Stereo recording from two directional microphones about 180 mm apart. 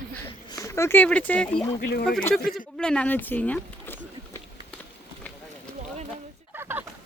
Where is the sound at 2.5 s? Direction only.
5° left (ahead or behind).